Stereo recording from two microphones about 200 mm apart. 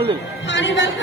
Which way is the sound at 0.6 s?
65° left (ahead or behind).